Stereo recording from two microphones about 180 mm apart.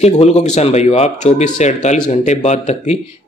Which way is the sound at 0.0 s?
40° left (ahead or behind).